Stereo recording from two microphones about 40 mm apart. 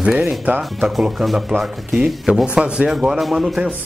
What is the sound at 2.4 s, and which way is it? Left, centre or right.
Speech, right.